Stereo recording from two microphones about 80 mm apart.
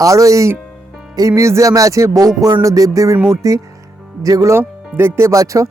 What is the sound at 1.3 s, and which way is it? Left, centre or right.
Music, right.